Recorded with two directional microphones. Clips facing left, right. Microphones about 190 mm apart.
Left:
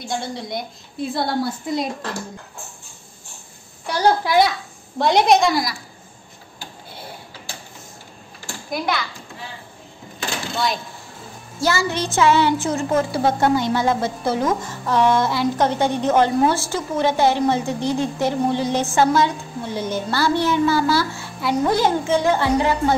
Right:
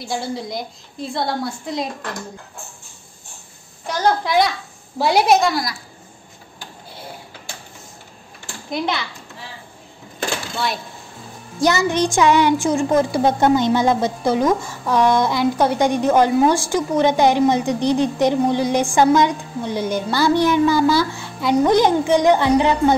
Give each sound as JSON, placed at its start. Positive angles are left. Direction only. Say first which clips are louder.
{"t": 0.0, "sound": "a woman's voice", "louder": "right 2 dB", "side_deg": -5}
{"t": 3.8, "sound": "a woman's voice", "louder": "left 1 dB", "side_deg": 10}
{"t": 11.6, "sound": "a woman's voice", "louder": "right 4 dB", "side_deg": -20}